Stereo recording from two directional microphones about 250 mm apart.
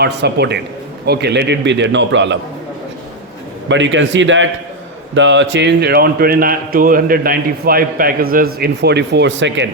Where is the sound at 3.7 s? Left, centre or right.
Right.